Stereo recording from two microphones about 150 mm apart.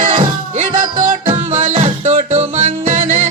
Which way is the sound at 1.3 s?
45° right (ahead or behind).